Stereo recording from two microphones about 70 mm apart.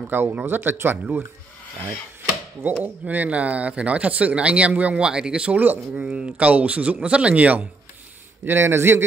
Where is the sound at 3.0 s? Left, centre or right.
Right.